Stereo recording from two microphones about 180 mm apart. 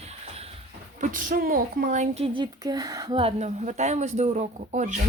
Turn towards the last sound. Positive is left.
turn(degrees=-40)  # may be behind; listen again after turning